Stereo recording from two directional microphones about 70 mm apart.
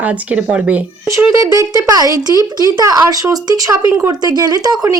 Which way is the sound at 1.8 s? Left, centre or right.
Right.